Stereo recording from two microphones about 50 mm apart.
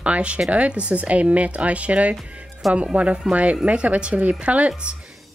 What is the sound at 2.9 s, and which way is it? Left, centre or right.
Speech, right.